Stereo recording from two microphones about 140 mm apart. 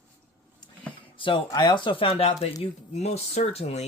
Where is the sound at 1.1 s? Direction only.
35° left (ahead or behind).